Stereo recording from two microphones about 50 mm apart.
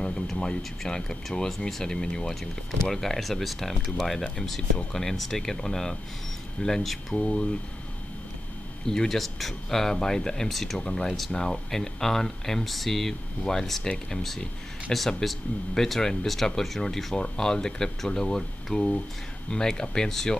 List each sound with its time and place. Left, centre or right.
0.0 s speech: centre
4.9 s speech: centre
7.2 s speech: centre
8.8 s speech: centre